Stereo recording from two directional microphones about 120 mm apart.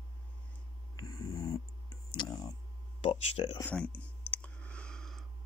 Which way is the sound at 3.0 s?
55° left (ahead or behind).